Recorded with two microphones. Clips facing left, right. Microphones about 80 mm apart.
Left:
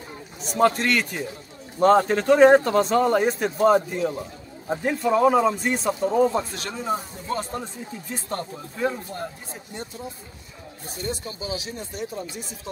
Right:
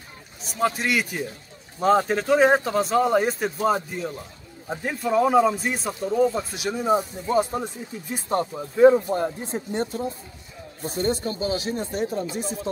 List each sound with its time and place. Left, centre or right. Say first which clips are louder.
0.4 s speech: left 4 dB; centre
6.5 s speech: right 5 dB; centre
8.4 s speech: right 13 dB; right
11.0 s speech: right 7 dB; right